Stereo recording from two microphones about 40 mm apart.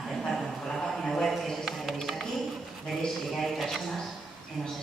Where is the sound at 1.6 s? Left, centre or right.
Centre.